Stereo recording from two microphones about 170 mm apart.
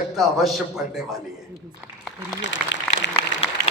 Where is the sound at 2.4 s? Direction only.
90° left.